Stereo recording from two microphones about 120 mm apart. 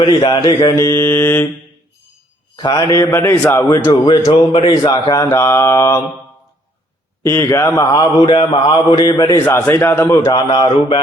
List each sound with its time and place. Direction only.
0.2 s mantra: 40° left (ahead or behind); by 1.5 s 20° left (ahead or behind)
2.6 s mantra: 35° left (ahead or behind)
3.9 s a man's voice: 40° left (ahead or behind)
4.3 s mantra: 45° left (ahead or behind)
4.9 s a man's voice: 35° left (ahead or behind)
5.3 s mantra: 25° left (ahead or behind)
7.3 s mantra: 25° left (ahead or behind)
8.2 s mantra: 45° left (ahead or behind)
9.0 s a man's voice: 30° left (ahead or behind)
9.4 s mantra: 20° left (ahead or behind)
10.2 s mantra: 40° left (ahead or behind)